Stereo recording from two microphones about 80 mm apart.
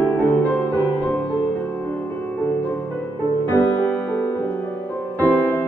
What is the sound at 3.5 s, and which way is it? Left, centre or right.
Music, left.